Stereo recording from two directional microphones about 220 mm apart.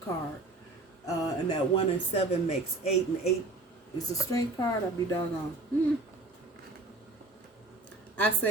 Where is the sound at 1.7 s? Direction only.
30° left (ahead or behind).